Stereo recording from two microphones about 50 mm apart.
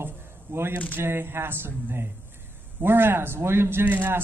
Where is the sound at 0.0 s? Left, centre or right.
Right.